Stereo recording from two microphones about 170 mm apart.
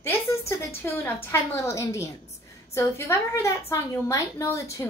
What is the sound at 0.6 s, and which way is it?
A woman's voice, 15° left (ahead or behind).